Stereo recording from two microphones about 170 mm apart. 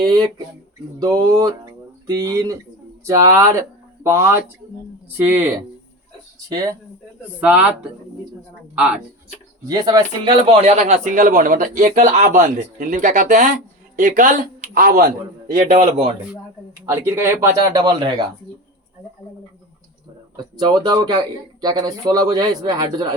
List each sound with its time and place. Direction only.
0.0 s a man's voice: 25° right (ahead or behind)
7.3 s speech: 10° right (ahead or behind)
8.7 s speech: 5° right (ahead or behind)
9.6 s a man's voice: 20° right (ahead or behind)
10.6 s speech: 40° right (ahead or behind); by 15.0 s 55° right (ahead or behind)
15.5 s speech: 45° right (ahead or behind)
16.8 s a man's voice: 15° right (ahead or behind)
20.3 s a man's voice: 25° right (ahead or behind)